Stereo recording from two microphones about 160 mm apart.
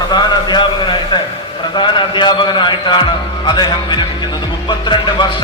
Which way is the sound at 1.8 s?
30° left (ahead or behind).